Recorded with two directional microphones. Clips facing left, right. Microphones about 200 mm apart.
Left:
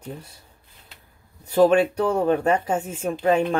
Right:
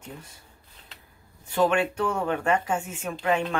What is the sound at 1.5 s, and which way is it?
Speech, 35° left (ahead or behind).